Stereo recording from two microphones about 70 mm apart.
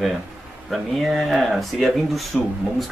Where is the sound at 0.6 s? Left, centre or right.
Centre.